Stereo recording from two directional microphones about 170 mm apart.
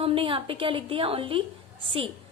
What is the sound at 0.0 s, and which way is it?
A woman's voice, 30° right (ahead or behind).